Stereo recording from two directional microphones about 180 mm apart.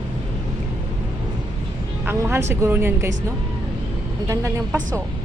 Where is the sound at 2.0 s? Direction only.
15° right (ahead or behind).